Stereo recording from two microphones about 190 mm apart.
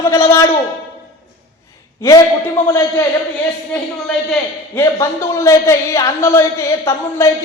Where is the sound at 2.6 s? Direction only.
15° left (ahead or behind).